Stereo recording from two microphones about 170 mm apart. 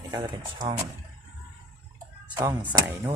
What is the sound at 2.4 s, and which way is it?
Speech, 15° right (ahead or behind).